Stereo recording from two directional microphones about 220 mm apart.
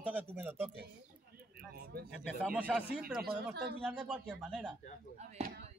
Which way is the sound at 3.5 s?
50° right (ahead or behind).